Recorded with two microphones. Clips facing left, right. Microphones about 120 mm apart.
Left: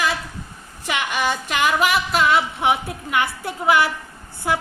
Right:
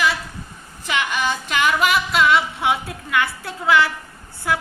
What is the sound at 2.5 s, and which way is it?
A woman's voice, 20° left (ahead or behind).